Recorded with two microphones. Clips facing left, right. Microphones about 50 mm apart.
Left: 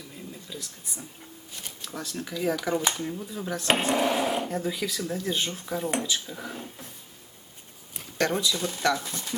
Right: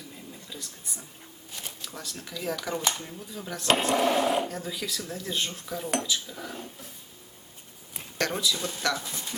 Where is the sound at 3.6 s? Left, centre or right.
Centre.